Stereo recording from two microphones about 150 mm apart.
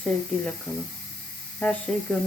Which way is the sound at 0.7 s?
15° left (ahead or behind).